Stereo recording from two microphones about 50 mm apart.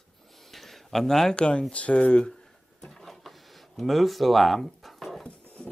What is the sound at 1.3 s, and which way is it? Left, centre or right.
Speech, left.